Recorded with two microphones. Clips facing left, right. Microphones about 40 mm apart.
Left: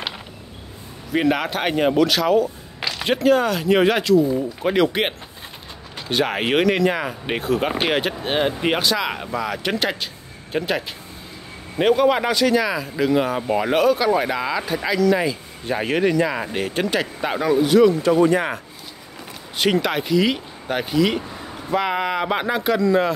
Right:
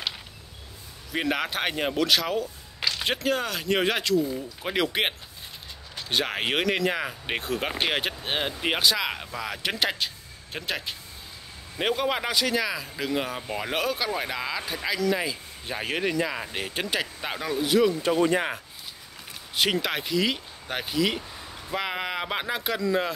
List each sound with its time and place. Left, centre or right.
1.1 s speech: centre
12.0 s speech: centre
13.7 s speech: centre
18.1 s speech: left
19.5 s speech: centre